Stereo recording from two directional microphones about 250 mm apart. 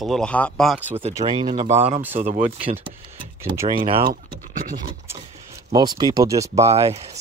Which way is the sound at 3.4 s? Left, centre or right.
Centre.